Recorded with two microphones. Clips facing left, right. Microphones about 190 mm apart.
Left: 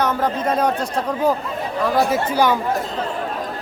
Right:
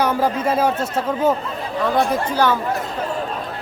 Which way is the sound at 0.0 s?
10° right (ahead or behind).